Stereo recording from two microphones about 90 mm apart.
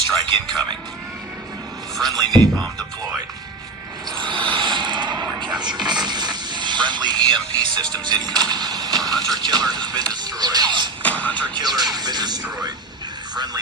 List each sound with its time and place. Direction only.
0.2 s speech: 55° right (ahead or behind)
2.0 s speech: 50° right (ahead or behind)
4.1 s a sound: 65° right (ahead or behind)
5.5 s speech: 55° right (ahead or behind)
11.0 s music: 15° left (ahead or behind)
11.4 s speech: 50° right (ahead or behind)